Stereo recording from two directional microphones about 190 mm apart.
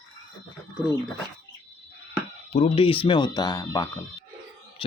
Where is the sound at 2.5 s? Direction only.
30° left (ahead or behind); by 3.8 s 15° left (ahead or behind).